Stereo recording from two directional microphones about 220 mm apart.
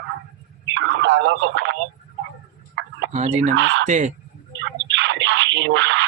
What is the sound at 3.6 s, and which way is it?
Speech, 60° right (ahead or behind).